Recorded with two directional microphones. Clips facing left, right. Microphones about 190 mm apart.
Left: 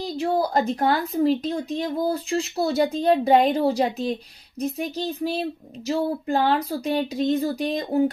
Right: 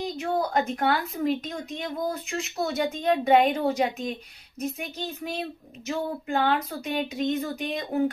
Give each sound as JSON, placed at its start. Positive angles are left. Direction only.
{"t": 0.0, "sound": "speech", "side_deg": 35}